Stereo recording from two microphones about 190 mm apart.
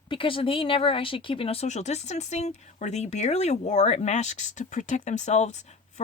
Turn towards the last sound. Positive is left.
turn(degrees=40)  # may be behind; listen again after turning